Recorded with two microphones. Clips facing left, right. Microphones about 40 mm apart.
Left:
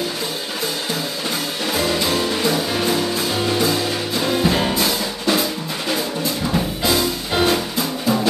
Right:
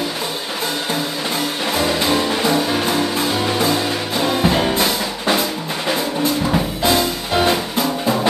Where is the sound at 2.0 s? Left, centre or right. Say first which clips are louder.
Right 2 dB; right.